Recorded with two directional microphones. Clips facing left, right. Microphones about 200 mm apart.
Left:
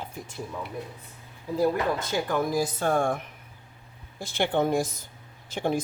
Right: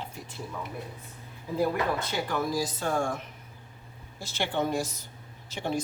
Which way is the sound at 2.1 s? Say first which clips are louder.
Left 3 dB; 50° left (ahead or behind).